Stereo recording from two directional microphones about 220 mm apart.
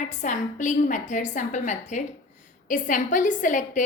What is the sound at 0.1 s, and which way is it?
A woman's voice, 35° left (ahead or behind).